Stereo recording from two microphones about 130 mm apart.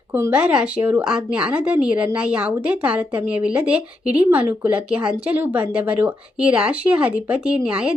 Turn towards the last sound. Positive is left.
turn(degrees=-5)  # may be behind; listen again after turning